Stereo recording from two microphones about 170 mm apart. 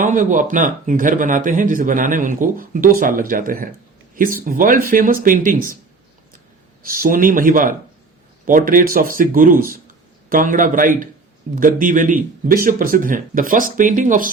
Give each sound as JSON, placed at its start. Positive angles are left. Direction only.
{"t": 0.0, "sound": "speech", "side_deg": -50}
{"t": 6.8, "sound": "speech", "side_deg": -55}